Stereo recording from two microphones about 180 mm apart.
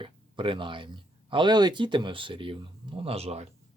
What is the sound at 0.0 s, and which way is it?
Speech, 30° right (ahead or behind).